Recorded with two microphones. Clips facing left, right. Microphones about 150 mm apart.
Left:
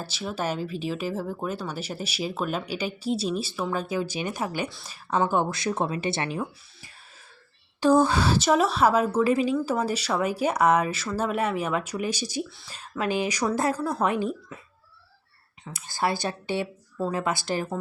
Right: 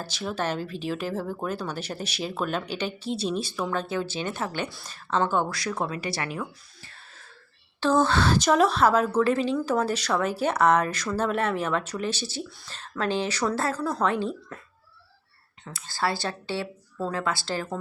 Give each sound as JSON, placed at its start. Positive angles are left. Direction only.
{"t": 0.0, "sound": "speech", "side_deg": 5}
{"t": 4.7, "sound": "a woman's voice", "side_deg": 0}
{"t": 5.1, "sound": "speech", "side_deg": 15}
{"t": 6.8, "sound": "a sound", "side_deg": 10}
{"t": 7.8, "sound": "speech", "side_deg": 10}
{"t": 15.6, "sound": "speech", "side_deg": 15}